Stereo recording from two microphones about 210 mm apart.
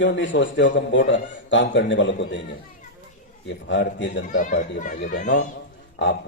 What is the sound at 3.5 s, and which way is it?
Speech, 60° left (ahead or behind).